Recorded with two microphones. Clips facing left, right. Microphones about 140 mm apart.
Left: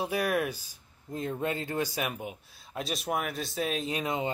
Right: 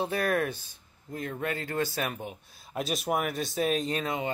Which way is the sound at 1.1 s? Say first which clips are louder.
Left 1 dB; 20° left (ahead or behind).